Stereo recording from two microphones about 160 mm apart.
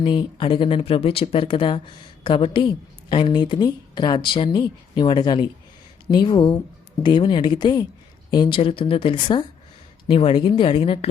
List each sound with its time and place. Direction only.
0.0 s a woman's voice: 30° left (ahead or behind)